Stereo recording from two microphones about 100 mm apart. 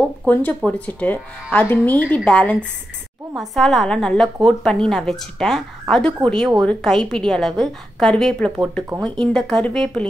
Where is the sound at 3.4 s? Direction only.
Centre (ahead or behind).